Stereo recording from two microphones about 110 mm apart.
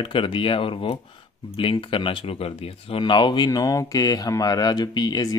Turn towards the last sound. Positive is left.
turn(degrees=40)  # may be behind; listen again after turning